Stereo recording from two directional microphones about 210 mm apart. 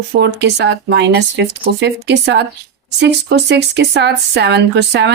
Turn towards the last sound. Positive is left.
turn(degrees=-55)  # may be behind; listen again after turning